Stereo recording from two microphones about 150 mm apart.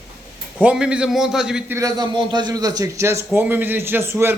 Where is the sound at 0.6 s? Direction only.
5° right (ahead or behind).